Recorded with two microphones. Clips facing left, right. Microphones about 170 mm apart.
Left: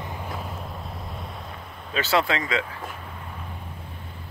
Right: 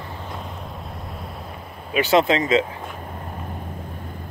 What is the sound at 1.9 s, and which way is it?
Speech, 15° right (ahead or behind).